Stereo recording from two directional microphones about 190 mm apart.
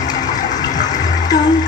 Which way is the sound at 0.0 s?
20° left (ahead or behind).